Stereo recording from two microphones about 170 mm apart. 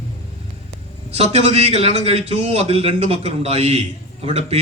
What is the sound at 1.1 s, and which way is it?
A man's voice, 40° right (ahead or behind).